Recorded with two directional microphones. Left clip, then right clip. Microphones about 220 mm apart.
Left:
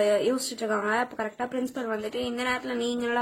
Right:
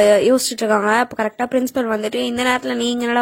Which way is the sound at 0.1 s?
40° right (ahead or behind).